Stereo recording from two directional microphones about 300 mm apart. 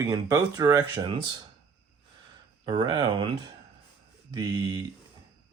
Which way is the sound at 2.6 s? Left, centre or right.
Centre.